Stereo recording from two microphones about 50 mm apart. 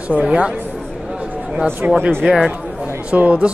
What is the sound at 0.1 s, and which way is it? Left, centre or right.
Speech, right.